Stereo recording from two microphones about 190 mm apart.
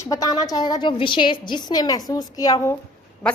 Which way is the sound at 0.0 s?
20° left (ahead or behind).